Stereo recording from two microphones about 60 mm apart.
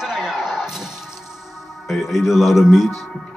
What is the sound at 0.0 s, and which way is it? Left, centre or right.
Music, centre.